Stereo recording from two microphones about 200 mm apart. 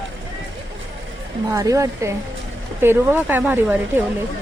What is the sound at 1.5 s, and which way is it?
A woman's voice, 15° right (ahead or behind).